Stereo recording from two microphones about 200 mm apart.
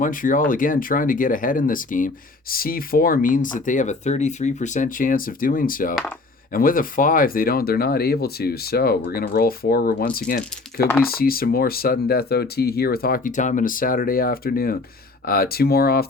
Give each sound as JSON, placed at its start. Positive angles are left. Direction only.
{"t": 0.0, "sound": "speech", "side_deg": 40}